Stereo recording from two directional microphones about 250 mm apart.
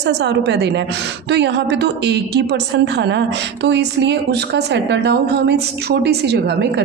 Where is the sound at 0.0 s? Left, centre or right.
Right.